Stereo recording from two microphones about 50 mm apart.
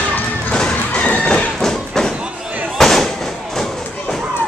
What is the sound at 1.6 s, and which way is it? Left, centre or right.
Thump, centre.